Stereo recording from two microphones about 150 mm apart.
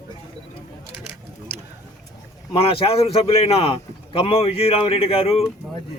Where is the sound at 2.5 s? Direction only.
40° left (ahead or behind).